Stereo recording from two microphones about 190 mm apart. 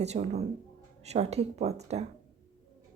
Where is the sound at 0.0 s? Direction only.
35° right (ahead or behind).